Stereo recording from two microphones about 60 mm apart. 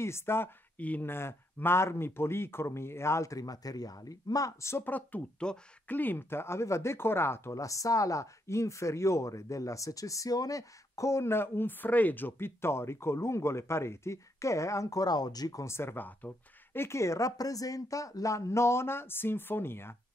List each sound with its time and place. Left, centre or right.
0.0 s speech: left
0.7 s speech: left
1.0 s speech: left
4.8 s speech: left
5.4 s speech: centre
5.9 s speech: left
7.5 s speech: left
15.6 s speech: left